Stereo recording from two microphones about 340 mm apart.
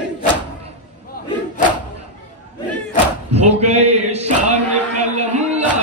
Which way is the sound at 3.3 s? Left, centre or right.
Centre.